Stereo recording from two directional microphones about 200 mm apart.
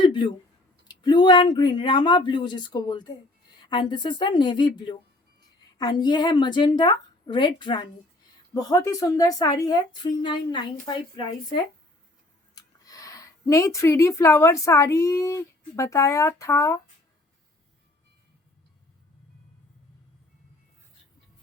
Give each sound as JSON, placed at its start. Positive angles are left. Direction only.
{"t": 0.0, "sound": "a sound", "side_deg": 25}
{"t": 0.9, "sound": "speech", "side_deg": 20}
{"t": 5.7, "sound": "speech", "side_deg": 20}